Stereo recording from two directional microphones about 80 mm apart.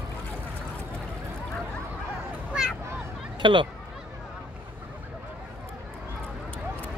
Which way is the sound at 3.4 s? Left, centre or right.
Right.